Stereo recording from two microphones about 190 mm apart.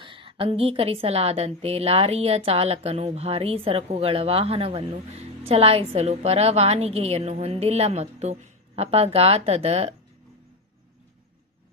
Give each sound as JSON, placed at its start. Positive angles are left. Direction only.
{"t": 0.0, "sound": "a woman's voice", "side_deg": -25}